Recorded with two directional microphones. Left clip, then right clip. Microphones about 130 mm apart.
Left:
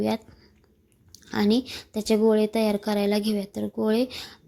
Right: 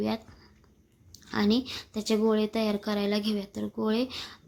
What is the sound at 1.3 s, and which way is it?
Speech, 30° left (ahead or behind).